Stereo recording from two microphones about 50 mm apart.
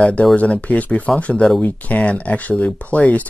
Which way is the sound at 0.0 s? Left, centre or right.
Left.